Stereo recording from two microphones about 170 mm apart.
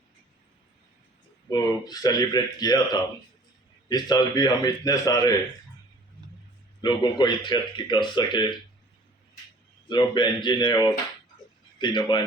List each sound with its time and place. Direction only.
1.5 s speech: 25° left (ahead or behind)
6.8 s speech: 25° left (ahead or behind)
9.9 s speech: 25° left (ahead or behind)